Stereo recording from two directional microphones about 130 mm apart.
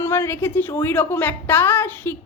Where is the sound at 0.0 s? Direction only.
20° left (ahead or behind).